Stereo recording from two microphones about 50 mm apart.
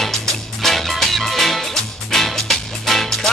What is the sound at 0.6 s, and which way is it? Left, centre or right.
Music, centre.